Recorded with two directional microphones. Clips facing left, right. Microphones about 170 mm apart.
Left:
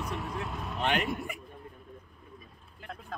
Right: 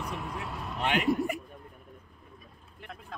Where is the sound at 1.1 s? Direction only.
40° right (ahead or behind).